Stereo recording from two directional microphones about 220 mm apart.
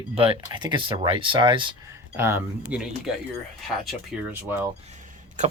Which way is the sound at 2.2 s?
10° right (ahead or behind).